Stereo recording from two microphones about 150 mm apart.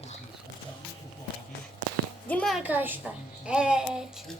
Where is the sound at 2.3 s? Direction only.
5° left (ahead or behind).